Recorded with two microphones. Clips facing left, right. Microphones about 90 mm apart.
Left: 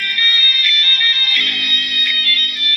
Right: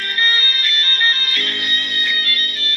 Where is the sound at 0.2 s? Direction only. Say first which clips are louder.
Right 3 dB; 35° right (ahead or behind).